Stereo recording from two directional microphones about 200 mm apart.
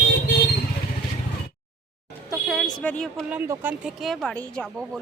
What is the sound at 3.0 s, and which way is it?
Speech, 5° right (ahead or behind).